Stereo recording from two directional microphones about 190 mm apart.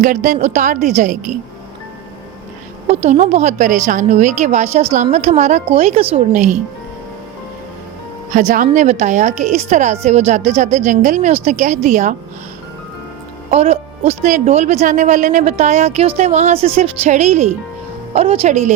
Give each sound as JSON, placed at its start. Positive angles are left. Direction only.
{"t": 0.0, "sound": "a woman's voice", "side_deg": -45}
{"t": 2.8, "sound": "speech", "side_deg": -35}
{"t": 8.3, "sound": "speech", "side_deg": -40}
{"t": 13.5, "sound": "speech", "side_deg": -35}